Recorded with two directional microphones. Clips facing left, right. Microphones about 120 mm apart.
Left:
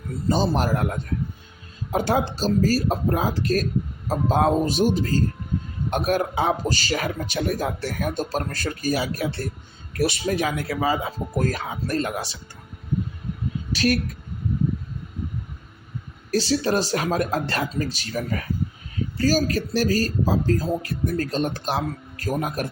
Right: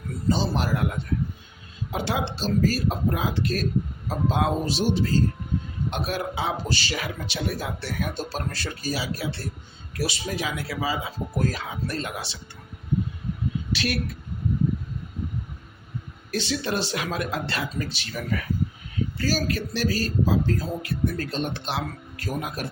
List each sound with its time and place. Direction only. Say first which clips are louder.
0.3 s a man's voice: left 3 dB; 45° left (ahead or behind)
1.9 s a man's voice: left 5 dB; 45° left (ahead or behind)
13.7 s speech: left 8 dB; 40° left (ahead or behind)
16.3 s speech: left 6 dB; 40° left (ahead or behind)